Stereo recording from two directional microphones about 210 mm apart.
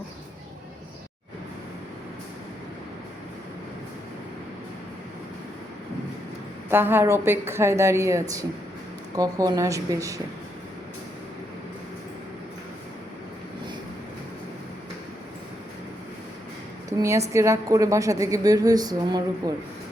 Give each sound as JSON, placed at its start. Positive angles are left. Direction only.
{"t": 6.7, "sound": "a woman's voice", "side_deg": -10}
{"t": 17.0, "sound": "a woman's voice", "side_deg": -15}